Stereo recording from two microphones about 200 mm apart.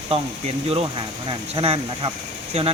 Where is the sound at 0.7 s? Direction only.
25° right (ahead or behind).